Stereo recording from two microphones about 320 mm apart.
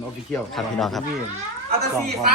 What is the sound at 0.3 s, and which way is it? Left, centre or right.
Speech, centre.